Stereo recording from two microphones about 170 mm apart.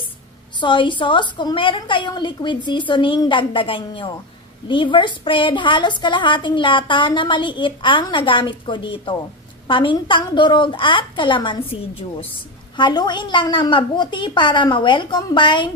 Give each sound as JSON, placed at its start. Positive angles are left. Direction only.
{"t": 0.6, "sound": "a woman's voice", "side_deg": 30}